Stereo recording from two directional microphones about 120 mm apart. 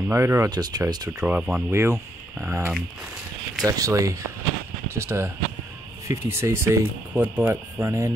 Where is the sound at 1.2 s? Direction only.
10° right (ahead or behind).